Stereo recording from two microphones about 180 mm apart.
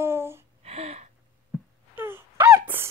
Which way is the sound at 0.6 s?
35° right (ahead or behind).